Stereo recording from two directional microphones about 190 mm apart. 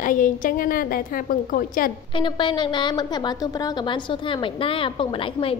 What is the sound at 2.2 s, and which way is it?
A woman's voice, 25° left (ahead or behind).